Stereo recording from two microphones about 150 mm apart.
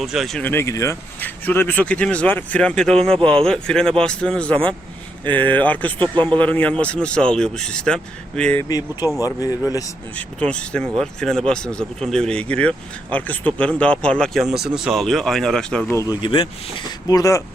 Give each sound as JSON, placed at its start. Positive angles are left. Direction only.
{"t": 0.0, "sound": "speech", "side_deg": 0}
{"t": 0.4, "sound": "speech", "side_deg": 15}
{"t": 9.2, "sound": "speech", "side_deg": 25}
{"t": 10.2, "sound": "speech", "side_deg": 5}
{"t": 16.2, "sound": "speech", "side_deg": 35}
{"t": 17.1, "sound": "speech", "side_deg": 20}